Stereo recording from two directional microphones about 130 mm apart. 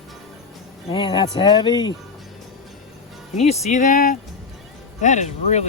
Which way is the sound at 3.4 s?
60° left (ahead or behind).